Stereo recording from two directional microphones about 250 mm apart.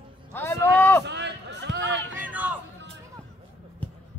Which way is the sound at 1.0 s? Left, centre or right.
Right.